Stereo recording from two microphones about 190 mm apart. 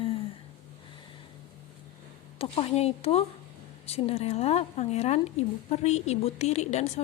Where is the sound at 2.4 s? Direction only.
30° left (ahead or behind).